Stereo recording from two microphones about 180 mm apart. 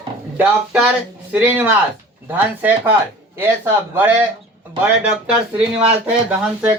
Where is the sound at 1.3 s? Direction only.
10° right (ahead or behind).